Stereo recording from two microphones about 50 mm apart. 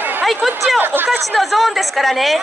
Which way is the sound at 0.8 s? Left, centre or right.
Right.